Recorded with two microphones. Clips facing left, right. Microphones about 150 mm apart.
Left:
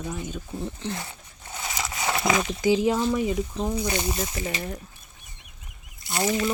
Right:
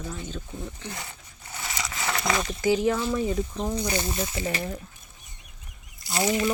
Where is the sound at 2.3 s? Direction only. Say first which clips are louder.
Left 3 dB; 5° left (ahead or behind).